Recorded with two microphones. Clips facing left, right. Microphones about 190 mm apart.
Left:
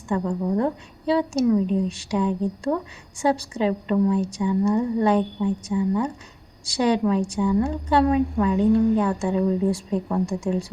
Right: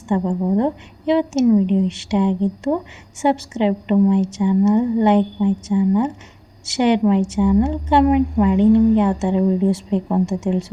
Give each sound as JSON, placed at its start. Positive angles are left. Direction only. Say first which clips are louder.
{"t": 0.1, "sound": "a woman's voice", "louder": "right 5 dB", "side_deg": -25}